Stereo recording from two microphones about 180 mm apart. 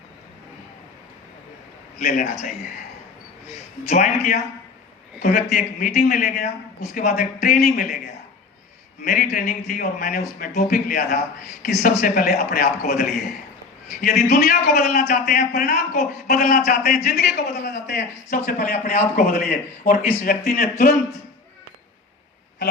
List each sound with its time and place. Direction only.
2.0 s speech: 45° left (ahead or behind)
3.8 s a man's voice: 40° left (ahead or behind)
6.1 s speech: 45° left (ahead or behind)
9.0 s speech: 50° left (ahead or behind)
19.1 s speech: 50° left (ahead or behind)
20.7 s a man's voice: 40° left (ahead or behind)